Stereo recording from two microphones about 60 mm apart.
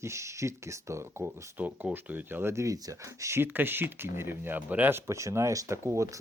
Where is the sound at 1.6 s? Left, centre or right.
Right.